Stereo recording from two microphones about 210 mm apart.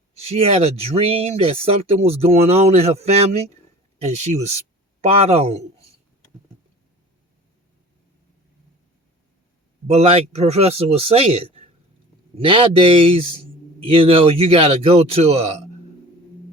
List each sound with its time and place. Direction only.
0.1 s speech: 30° right (ahead or behind)
9.8 s speech: 30° right (ahead or behind)